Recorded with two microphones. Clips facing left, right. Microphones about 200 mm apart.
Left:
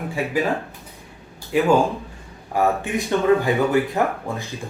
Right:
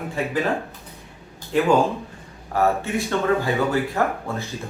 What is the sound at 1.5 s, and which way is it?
Speech, 10° left (ahead or behind).